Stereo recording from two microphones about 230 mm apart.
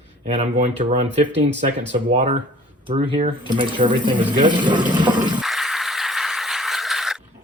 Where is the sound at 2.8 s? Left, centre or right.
Right.